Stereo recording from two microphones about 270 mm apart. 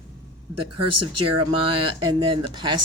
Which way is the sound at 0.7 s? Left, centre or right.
Right.